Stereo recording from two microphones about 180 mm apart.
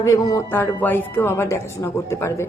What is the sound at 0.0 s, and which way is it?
A woman's voice, 20° left (ahead or behind).